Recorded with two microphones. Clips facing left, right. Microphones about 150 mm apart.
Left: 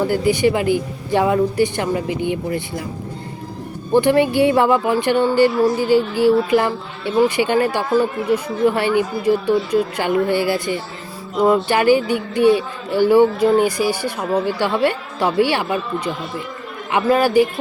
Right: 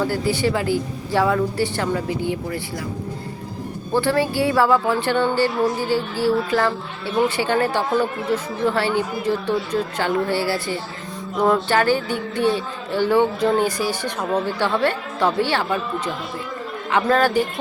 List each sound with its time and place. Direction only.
0.1 s speech: 15° left (ahead or behind)
3.9 s speech: 20° left (ahead or behind)